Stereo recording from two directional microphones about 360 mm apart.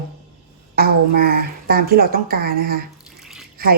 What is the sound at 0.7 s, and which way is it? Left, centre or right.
A woman's voice, right.